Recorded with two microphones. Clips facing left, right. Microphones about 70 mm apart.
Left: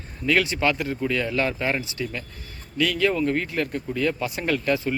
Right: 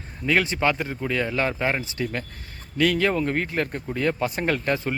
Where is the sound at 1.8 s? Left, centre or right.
Right.